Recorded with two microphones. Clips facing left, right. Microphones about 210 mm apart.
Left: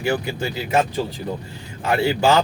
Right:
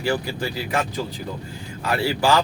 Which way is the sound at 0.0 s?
25° left (ahead or behind).